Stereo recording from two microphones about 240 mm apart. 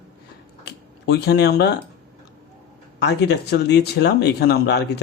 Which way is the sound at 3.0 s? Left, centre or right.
Left.